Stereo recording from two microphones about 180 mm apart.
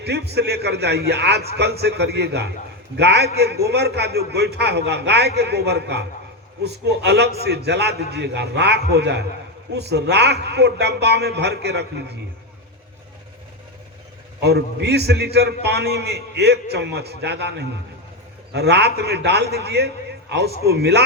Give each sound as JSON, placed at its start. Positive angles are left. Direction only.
{"t": 0.0, "sound": "a man's voice", "side_deg": -65}
{"t": 14.4, "sound": "a man's voice", "side_deg": -65}